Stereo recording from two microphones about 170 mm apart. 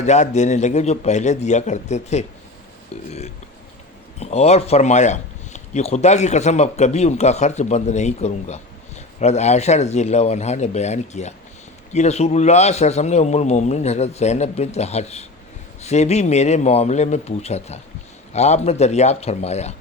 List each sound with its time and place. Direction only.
0.0 s a man's voice: 45° left (ahead or behind)